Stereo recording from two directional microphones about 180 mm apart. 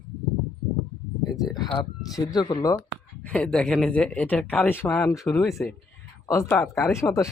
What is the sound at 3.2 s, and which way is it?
Speech, 5° left (ahead or behind).